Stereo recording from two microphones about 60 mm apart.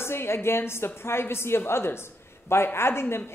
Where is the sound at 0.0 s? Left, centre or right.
Left.